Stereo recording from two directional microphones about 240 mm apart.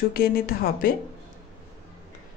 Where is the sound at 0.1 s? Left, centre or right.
Left.